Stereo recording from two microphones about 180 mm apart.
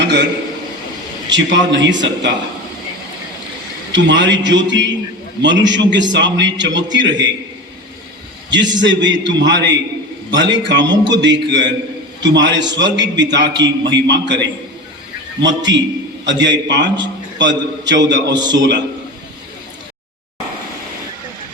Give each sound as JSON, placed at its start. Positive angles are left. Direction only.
{"t": 0.0, "sound": "a sound", "side_deg": -70}
{"t": 1.3, "sound": "a man's voice", "side_deg": -90}
{"t": 3.9, "sound": "a man's voice", "side_deg": -80}
{"t": 8.7, "sound": "a man's voice", "side_deg": -85}